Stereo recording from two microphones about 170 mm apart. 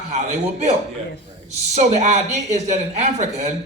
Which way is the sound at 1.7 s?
40° right (ahead or behind).